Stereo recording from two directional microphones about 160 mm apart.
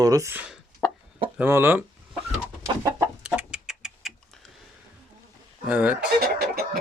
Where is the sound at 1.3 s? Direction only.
15° right (ahead or behind).